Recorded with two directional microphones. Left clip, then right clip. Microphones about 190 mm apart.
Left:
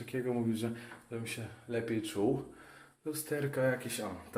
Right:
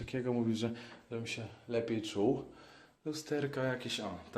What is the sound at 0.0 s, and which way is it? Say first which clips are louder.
Speech: even; 25° right (ahead or behind).